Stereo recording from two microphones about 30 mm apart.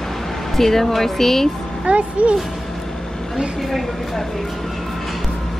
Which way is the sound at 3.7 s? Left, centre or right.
Centre.